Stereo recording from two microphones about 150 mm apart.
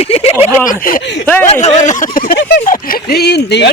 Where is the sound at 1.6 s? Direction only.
55° left (ahead or behind).